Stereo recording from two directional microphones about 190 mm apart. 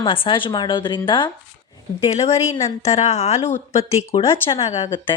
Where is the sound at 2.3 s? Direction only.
15° left (ahead or behind).